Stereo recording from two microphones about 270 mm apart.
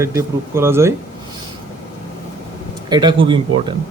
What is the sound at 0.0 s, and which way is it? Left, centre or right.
Speech, centre.